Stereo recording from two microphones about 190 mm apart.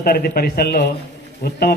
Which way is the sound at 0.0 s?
55° left (ahead or behind).